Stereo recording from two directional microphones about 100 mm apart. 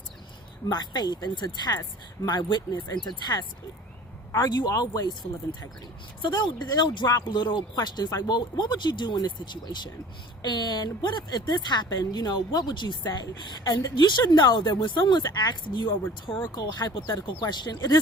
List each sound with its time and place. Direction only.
0.7 s speech: 45° left (ahead or behind)
6.2 s speech: 45° left (ahead or behind)